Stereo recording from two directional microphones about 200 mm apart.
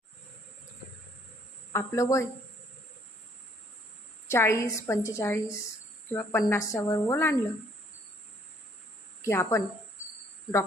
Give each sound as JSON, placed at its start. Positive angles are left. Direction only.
{"t": 1.7, "sound": "a woman's voice", "side_deg": 15}
{"t": 4.3, "sound": "a woman's voice", "side_deg": 15}
{"t": 9.2, "sound": "a woman's voice", "side_deg": 15}